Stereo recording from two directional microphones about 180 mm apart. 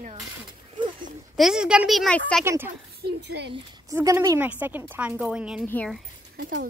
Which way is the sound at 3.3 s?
70° right (ahead or behind).